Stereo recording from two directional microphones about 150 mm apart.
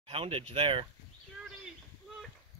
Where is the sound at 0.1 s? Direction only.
40° right (ahead or behind).